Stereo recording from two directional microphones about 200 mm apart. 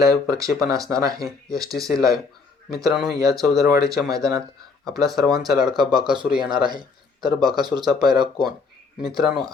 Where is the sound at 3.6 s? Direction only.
20° right (ahead or behind).